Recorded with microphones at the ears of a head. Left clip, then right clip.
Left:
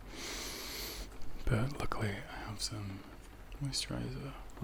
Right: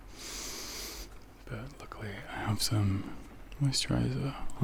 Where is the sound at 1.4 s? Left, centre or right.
Left.